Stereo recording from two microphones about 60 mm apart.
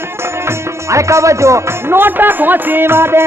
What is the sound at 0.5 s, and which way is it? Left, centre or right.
Music, right.